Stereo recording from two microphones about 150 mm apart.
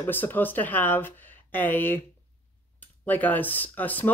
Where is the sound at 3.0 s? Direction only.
10° left (ahead or behind).